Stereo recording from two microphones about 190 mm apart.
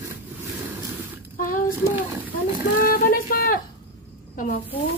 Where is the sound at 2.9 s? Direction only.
50° left (ahead or behind).